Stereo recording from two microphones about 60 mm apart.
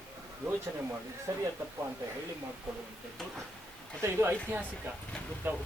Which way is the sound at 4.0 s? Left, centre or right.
Right.